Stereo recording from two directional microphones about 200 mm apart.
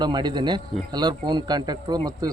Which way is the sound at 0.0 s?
20° right (ahead or behind).